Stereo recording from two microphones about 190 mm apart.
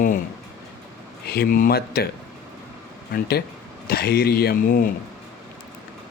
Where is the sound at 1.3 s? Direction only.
55° left (ahead or behind).